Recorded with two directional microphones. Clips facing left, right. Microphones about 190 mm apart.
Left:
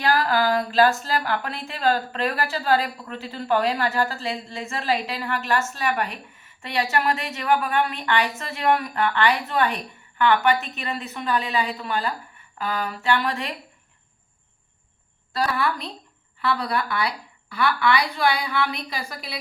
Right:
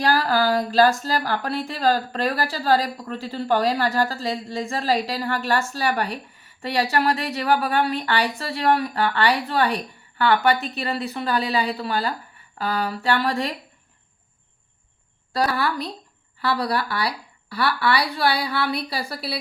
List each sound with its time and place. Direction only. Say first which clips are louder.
0.0 s a woman's voice: right 1 dB; 35° right (ahead or behind)
15.3 s a woman's voice: right 1 dB; 35° right (ahead or behind)